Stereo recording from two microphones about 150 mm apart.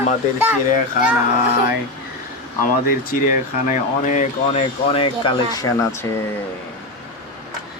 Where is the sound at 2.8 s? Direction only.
65° left (ahead or behind).